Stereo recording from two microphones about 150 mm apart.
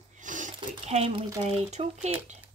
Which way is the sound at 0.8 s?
45° right (ahead or behind).